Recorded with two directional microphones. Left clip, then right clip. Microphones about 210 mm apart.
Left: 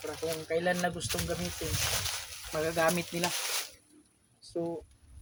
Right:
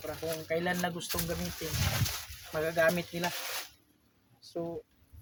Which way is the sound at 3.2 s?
45° left (ahead or behind).